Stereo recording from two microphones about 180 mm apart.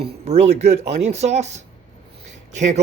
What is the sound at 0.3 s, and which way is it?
Speech, 35° right (ahead or behind).